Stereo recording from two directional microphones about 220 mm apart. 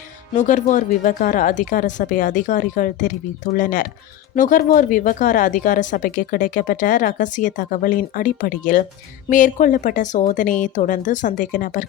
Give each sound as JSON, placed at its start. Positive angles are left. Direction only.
{"t": 0.3, "sound": "speech", "side_deg": 35}